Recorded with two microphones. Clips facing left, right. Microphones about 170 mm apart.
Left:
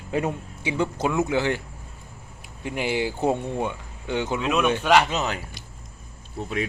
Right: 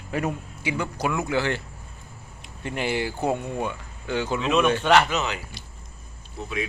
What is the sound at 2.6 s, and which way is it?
Speech, 10° left (ahead or behind).